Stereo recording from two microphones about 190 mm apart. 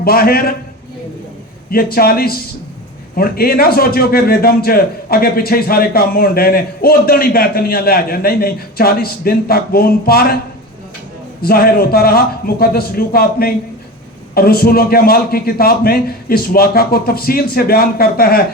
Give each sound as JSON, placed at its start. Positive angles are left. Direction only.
{"t": 0.0, "sound": "a man's voice", "side_deg": 50}
{"t": 1.7, "sound": "a man's voice", "side_deg": 50}
{"t": 11.4, "sound": "a man's voice", "side_deg": 50}